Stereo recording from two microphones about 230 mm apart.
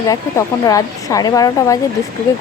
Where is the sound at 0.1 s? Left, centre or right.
Centre.